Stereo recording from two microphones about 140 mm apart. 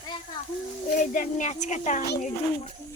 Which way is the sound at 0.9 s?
70° left (ahead or behind).